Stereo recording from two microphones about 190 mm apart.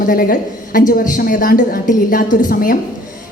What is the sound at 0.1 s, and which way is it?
Speech, 50° left (ahead or behind).